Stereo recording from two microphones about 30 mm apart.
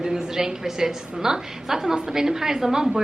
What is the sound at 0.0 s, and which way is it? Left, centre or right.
A woman's voice, centre.